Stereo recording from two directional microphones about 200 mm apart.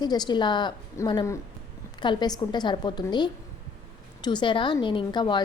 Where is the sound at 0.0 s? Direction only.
20° left (ahead or behind).